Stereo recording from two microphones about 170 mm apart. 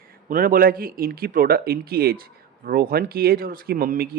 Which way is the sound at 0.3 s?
55° right (ahead or behind).